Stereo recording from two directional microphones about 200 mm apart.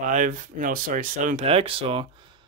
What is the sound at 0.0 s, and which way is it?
Speech, 40° right (ahead or behind).